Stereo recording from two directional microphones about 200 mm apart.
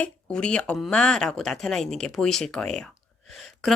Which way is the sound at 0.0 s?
5° left (ahead or behind).